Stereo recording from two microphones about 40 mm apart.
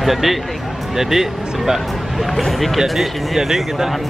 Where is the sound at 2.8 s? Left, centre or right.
Centre.